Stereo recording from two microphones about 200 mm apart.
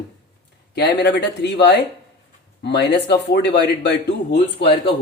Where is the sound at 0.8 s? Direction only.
55° left (ahead or behind).